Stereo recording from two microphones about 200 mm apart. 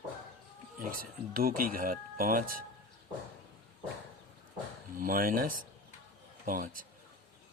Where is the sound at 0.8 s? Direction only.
45° right (ahead or behind).